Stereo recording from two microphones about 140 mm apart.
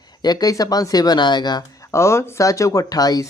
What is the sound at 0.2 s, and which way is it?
Speech, 30° left (ahead or behind).